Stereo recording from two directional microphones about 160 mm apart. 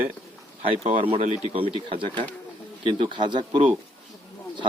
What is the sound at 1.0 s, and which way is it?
A man's voice, 40° right (ahead or behind).